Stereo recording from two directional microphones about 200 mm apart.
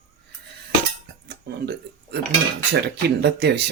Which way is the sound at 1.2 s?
55° right (ahead or behind).